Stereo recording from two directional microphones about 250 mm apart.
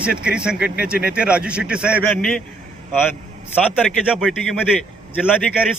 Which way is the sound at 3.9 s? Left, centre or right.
Centre.